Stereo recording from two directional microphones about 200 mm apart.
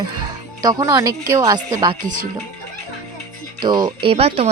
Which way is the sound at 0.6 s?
20° right (ahead or behind).